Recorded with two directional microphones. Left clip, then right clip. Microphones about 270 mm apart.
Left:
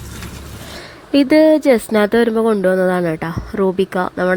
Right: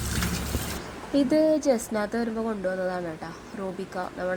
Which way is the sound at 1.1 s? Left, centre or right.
Left.